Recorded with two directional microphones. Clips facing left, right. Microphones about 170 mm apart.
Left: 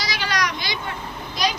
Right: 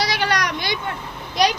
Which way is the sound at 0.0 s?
60° right (ahead or behind).